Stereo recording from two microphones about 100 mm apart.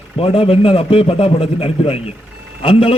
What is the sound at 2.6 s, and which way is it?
Speech, 65° left (ahead or behind).